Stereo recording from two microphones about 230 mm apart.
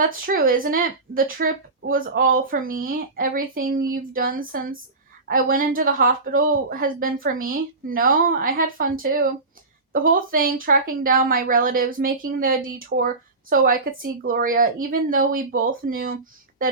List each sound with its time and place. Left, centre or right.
0.1 s speech: right